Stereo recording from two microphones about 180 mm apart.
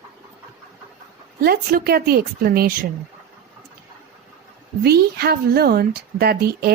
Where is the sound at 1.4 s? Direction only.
60° right (ahead or behind).